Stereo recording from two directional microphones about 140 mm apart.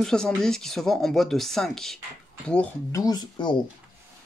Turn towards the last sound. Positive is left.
turn(degrees=30)  # may be behind; listen again after turning